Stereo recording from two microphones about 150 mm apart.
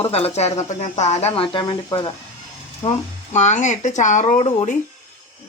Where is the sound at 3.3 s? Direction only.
50° left (ahead or behind).